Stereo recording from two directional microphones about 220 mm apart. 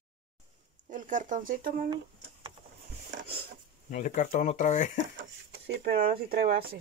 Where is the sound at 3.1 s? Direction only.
50° right (ahead or behind).